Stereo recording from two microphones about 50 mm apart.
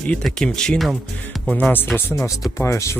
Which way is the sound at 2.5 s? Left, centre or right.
Left.